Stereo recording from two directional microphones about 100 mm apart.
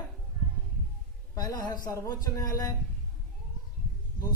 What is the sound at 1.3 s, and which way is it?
Speech, 40° left (ahead or behind).